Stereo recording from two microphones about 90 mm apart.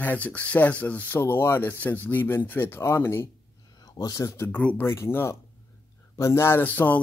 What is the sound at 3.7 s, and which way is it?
Speech, 45° left (ahead or behind).